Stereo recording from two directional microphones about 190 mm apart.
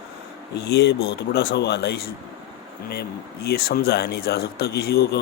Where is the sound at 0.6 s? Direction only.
65° left (ahead or behind).